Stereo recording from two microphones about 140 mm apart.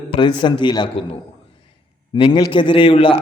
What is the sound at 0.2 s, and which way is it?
Speech, 35° left (ahead or behind).